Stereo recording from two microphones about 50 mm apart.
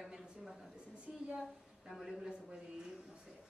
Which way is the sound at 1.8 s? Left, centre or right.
Centre.